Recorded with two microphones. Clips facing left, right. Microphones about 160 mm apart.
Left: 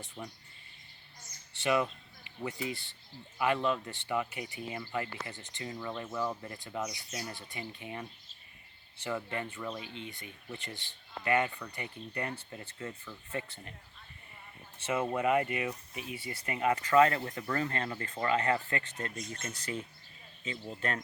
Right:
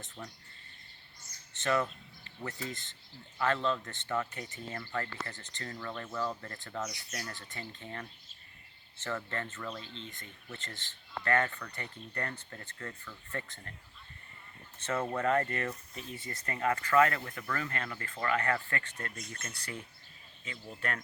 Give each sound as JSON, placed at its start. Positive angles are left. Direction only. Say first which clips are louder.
{"t": 0.2, "sound": "speech", "louder": "left 2 dB", "side_deg": 10}
{"t": 1.6, "sound": "speech", "louder": "left 1 dB", "side_deg": 15}
{"t": 14.8, "sound": "speech", "louder": "left 1 dB", "side_deg": 10}